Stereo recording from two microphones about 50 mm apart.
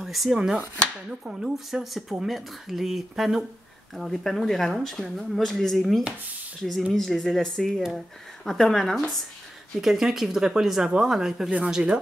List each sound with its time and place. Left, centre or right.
0.0 s chopping: centre
0.4 s speech: centre
3.9 s speech: centre
6.9 s speech: centre
9.8 s speech: centre